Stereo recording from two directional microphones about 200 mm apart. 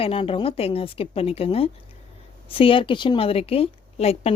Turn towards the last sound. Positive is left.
turn(degrees=30)  # may be behind; listen again after turning